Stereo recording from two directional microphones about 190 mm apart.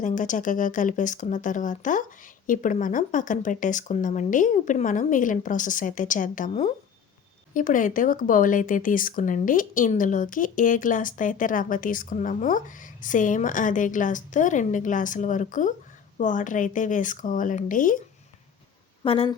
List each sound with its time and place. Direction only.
0.0 s speech: 45° left (ahead or behind)
19.0 s speech: 30° left (ahead or behind)